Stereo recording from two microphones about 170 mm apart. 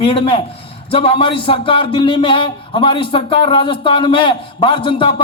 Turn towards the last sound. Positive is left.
turn(degrees=30)  # may be behind; listen again after turning